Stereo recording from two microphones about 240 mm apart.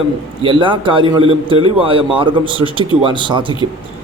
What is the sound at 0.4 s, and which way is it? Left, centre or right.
A man's voice, right.